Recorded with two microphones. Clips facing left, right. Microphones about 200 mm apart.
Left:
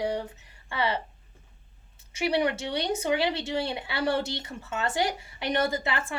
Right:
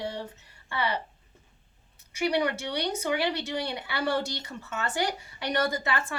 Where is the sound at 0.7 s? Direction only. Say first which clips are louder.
Left 2 dB; 25° left (ahead or behind).